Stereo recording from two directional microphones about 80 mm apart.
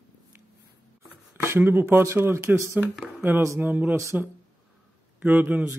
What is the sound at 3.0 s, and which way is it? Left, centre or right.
Speech, right.